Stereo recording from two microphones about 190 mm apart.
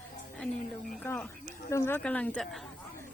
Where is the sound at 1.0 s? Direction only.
10° left (ahead or behind).